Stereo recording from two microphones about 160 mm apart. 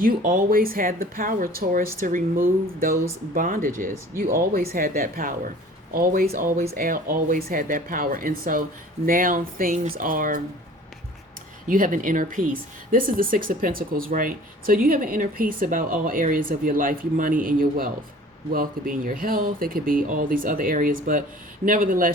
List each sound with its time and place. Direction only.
0.0 s speech: 60° right (ahead or behind)
6.6 s speech: 50° right (ahead or behind)
11.7 s speech: 55° right (ahead or behind)